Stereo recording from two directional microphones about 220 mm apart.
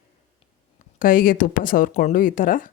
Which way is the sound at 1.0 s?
40° left (ahead or behind).